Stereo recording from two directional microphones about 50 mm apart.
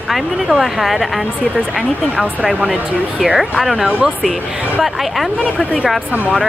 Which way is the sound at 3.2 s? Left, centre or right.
Centre.